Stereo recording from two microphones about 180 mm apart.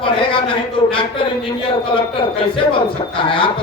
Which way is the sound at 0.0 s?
30° left (ahead or behind).